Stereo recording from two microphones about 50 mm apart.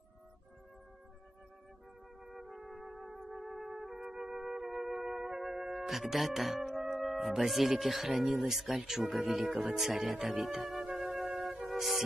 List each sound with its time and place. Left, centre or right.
2.2 s music: centre
8.4 s speech: centre
11.6 s music: centre